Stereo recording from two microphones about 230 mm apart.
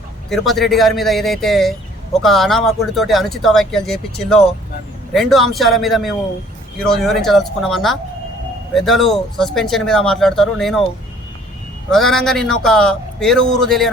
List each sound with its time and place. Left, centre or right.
0.3 s speech: centre
11.9 s speech: centre